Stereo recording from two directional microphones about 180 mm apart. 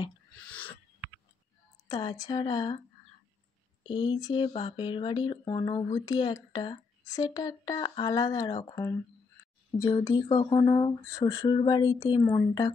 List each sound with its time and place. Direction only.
0.5 s a sound: 10° left (ahead or behind)
1.9 s speech: 25° left (ahead or behind)
3.9 s speech: 25° left (ahead or behind)